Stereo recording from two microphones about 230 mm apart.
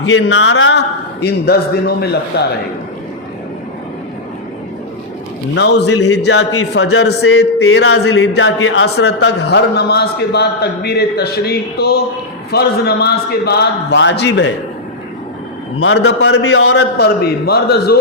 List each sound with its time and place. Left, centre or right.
0.0 s a man's voice: left
5.5 s a man's voice: left
15.8 s a man's voice: left
17.0 s a man's voice: left